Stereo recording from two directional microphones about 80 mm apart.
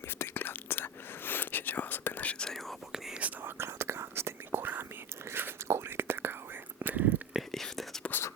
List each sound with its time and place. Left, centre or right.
0.2 s whispering: left
2.4 s whispering: centre
3.2 s whispering: centre
3.6 s whispering: right
7.5 s whispering: centre